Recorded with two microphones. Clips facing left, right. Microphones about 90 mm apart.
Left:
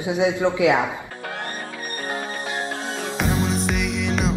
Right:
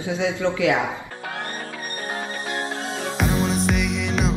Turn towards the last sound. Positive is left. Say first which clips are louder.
# even
turn(degrees=0)  # may be behind; listen again after turning